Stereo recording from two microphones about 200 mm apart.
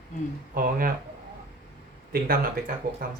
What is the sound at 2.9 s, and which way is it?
Speech, 45° right (ahead or behind).